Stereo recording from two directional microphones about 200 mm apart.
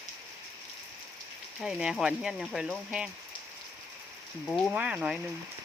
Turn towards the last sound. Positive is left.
turn(degrees=-5)  # may be behind; listen again after turning